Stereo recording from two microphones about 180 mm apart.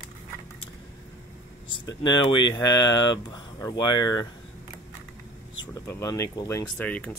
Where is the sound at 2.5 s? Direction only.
20° left (ahead or behind).